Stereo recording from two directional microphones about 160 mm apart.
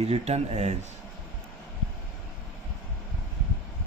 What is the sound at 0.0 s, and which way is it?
Speech, 40° right (ahead or behind).